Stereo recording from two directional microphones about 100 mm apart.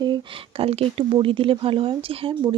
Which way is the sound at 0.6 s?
75° right (ahead or behind).